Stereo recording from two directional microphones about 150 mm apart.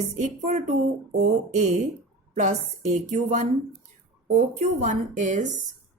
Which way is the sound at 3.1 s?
60° right (ahead or behind).